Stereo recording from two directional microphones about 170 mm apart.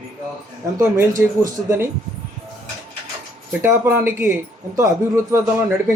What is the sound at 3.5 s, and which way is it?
Speech, 15° right (ahead or behind).